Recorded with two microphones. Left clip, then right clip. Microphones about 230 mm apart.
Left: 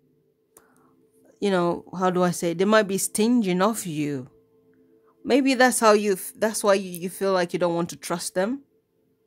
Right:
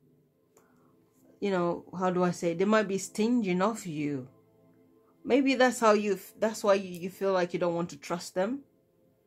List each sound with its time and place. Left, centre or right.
1.4 s speech: left